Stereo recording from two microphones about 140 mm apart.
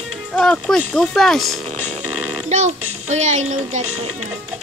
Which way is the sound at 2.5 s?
55° right (ahead or behind).